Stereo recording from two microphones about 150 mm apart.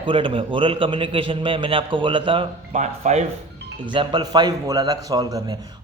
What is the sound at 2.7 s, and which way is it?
Speech, 50° right (ahead or behind).